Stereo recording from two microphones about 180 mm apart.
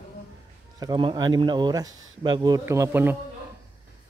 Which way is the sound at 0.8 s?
25° right (ahead or behind).